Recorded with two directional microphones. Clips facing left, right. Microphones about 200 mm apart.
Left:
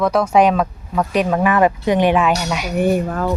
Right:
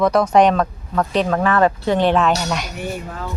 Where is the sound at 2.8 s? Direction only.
55° left (ahead or behind).